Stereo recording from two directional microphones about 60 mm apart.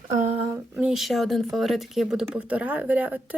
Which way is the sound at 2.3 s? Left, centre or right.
Right.